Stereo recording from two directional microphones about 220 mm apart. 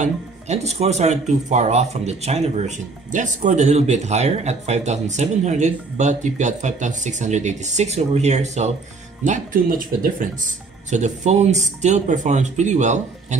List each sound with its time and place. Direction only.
0.0 s speech: 30° right (ahead or behind)